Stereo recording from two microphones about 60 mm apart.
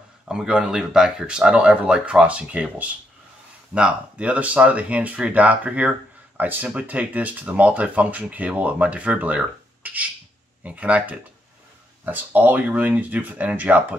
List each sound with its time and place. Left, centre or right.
0.3 s speech: centre